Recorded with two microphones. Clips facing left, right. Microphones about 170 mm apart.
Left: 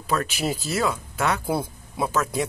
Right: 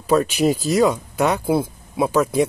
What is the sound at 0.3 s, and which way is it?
Speech, 35° right (ahead or behind).